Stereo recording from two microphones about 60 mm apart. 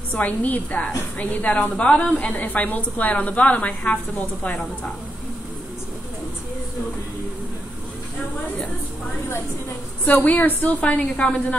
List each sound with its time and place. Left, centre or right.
0.2 s a woman's voice: left
10.0 s a woman's voice: left